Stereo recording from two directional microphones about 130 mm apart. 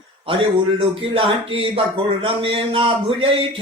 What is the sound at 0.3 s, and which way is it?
Speech, 45° right (ahead or behind).